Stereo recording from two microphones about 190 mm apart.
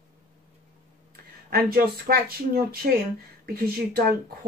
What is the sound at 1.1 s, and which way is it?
Speech, 55° right (ahead or behind).